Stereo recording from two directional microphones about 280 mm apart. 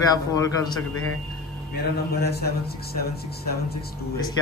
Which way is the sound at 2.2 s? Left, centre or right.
Left.